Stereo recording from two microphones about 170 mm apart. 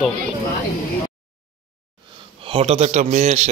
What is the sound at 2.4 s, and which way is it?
A man's voice, 35° right (ahead or behind).